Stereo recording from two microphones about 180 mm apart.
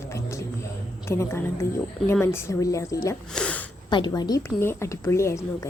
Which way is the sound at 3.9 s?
25° left (ahead or behind).